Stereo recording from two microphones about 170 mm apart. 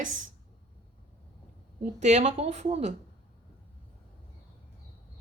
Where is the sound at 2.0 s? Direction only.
40° right (ahead or behind).